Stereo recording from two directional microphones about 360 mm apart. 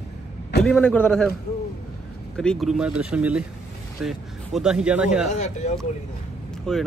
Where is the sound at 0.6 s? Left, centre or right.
Centre.